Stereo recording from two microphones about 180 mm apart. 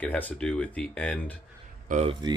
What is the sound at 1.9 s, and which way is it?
Speech, 40° right (ahead or behind).